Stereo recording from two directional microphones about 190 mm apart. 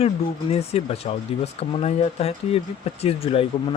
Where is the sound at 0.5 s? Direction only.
35° left (ahead or behind).